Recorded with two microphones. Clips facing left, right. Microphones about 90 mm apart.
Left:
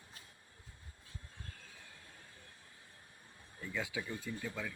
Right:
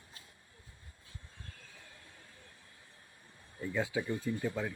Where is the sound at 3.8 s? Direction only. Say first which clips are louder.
Right 7 dB; 25° right (ahead or behind).